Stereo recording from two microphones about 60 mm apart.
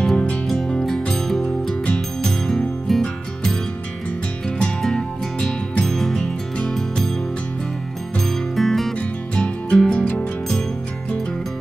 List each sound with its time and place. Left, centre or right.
0.0 s music: centre
4.8 s music: centre
8.5 s music: centre
8.9 s music: centre